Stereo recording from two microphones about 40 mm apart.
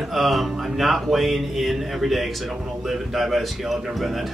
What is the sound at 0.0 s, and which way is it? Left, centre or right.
Speech, centre.